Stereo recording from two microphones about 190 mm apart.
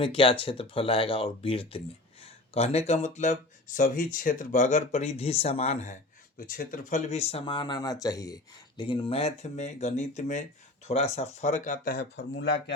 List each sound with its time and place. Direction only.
0.0 s speech: 30° left (ahead or behind)
6.5 s speech: 45° left (ahead or behind); by 12.7 s 65° left (ahead or behind)